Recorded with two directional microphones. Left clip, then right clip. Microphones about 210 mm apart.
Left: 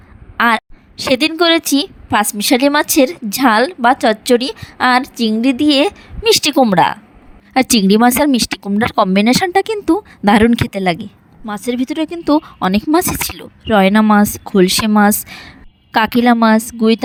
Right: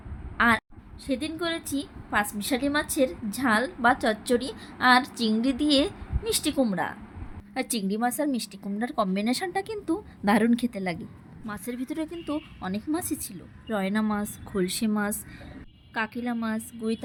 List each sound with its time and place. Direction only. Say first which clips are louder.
0.3 s a woman's voice: left 9 dB; 45° left (ahead or behind)
11.4 s a woman's voice: left 15 dB; 35° left (ahead or behind)